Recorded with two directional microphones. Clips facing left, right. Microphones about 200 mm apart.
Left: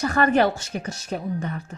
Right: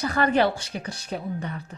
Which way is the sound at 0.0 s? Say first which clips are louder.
Left 2 dB; 50° left (ahead or behind).